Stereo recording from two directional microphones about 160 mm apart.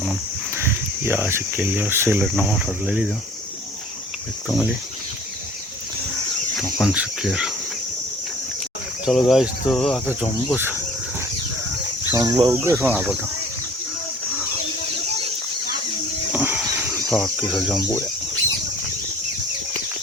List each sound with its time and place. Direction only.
0.5 s speech: 15° right (ahead or behind)
2.2 s speech: centre (ahead or behind)
4.4 s speech: centre (ahead or behind)
6.6 s speech: centre (ahead or behind)
9.0 s speech: centre (ahead or behind)
12.1 s speech: 20° right (ahead or behind)
12.8 s speech: 5° right (ahead or behind)
16.3 s a sound: 10° right (ahead or behind)
17.1 s speech: centre (ahead or behind)